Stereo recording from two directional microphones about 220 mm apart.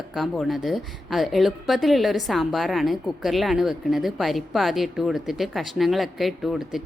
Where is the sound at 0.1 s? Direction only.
Centre (ahead or behind).